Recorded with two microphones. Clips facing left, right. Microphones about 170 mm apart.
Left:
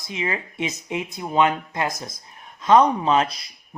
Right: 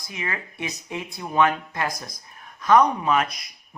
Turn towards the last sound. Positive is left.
turn(degrees=30)  # may be behind; listen again after turning